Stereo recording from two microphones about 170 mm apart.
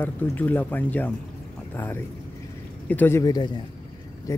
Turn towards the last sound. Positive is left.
turn(degrees=15)  # may be behind; listen again after turning